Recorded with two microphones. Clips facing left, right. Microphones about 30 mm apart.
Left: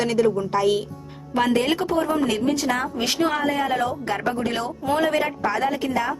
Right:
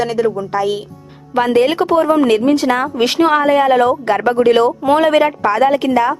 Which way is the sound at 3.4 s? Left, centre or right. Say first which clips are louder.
Right 11 dB; right.